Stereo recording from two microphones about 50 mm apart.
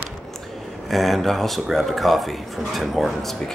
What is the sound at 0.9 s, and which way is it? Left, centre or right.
Speech, centre.